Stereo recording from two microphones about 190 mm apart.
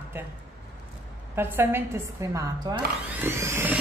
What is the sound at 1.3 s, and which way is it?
Speech, 15° right (ahead or behind).